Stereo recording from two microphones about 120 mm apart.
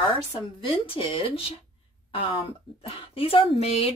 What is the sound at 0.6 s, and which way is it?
A woman's voice, 50° left (ahead or behind).